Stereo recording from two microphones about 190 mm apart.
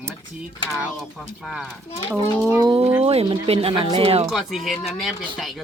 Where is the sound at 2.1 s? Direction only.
15° right (ahead or behind).